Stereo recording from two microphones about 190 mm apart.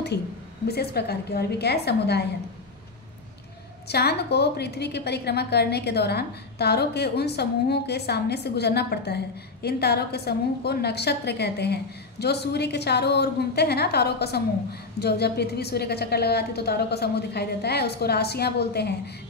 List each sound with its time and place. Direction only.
0.7 s a woman's voice: 55° left (ahead or behind)
3.8 s a woman's voice: 60° left (ahead or behind)